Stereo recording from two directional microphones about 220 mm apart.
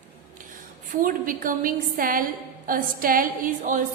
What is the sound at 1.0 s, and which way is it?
A woman's voice, 40° right (ahead or behind).